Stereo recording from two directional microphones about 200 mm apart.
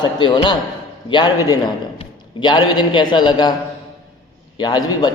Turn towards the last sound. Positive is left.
turn(degrees=20)  # may be behind; listen again after turning